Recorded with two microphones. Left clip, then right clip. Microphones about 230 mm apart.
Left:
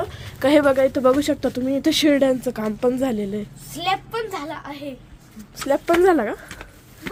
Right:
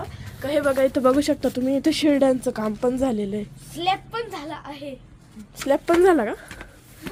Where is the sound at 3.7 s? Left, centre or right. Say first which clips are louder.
Left 1 dB; centre.